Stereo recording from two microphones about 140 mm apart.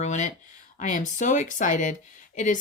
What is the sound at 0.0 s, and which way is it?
Speech, 60° left (ahead or behind).